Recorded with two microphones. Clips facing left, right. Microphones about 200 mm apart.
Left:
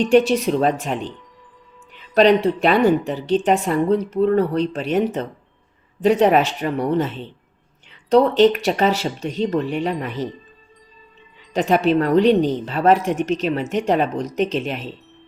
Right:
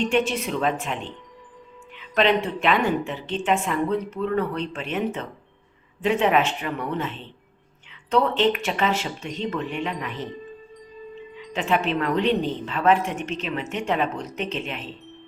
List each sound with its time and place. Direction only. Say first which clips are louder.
0.1 s a woman's voice: left 8 dB; 35° left (ahead or behind)
8.1 s a woman's voice: left 7 dB; 40° left (ahead or behind)
11.5 s a woman's voice: left 7 dB; 40° left (ahead or behind)